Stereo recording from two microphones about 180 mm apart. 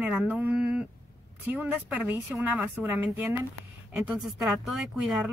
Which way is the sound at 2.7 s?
15° right (ahead or behind).